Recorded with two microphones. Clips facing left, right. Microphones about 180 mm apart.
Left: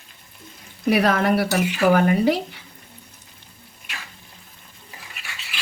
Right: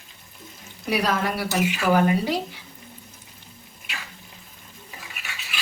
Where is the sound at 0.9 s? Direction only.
55° left (ahead or behind).